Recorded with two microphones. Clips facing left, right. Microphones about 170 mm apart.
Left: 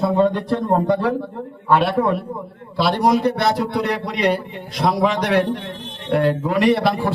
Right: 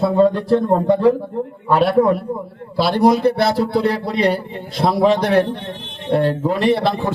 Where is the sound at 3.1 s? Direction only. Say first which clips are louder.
Right 2 dB; 30° right (ahead or behind).